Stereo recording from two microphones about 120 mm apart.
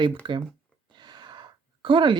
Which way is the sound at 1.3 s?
40° right (ahead or behind).